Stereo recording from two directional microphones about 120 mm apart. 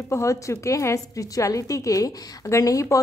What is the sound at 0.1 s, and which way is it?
A woman's voice, 25° left (ahead or behind).